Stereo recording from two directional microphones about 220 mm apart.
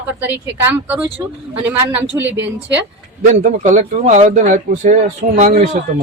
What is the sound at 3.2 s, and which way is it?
A man's voice, 35° right (ahead or behind).